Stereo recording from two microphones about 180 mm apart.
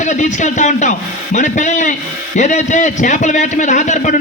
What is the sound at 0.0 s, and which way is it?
A man's voice, 40° left (ahead or behind).